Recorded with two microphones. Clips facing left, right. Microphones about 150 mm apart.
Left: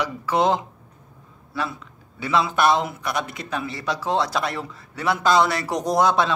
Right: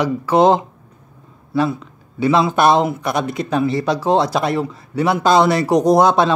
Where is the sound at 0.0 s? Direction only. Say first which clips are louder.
Right 7 dB; 30° right (ahead or behind).